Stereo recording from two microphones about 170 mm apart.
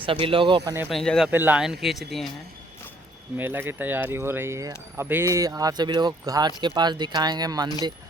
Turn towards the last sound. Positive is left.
turn(degrees=-20)  # may be behind; listen again after turning